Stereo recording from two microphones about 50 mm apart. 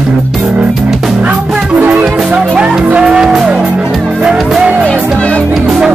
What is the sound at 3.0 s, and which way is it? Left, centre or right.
Music, centre.